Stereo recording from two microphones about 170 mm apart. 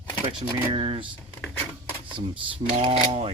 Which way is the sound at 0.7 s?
30° right (ahead or behind).